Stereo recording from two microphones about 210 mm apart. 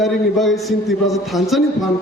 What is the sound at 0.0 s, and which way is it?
A man's voice, centre (ahead or behind).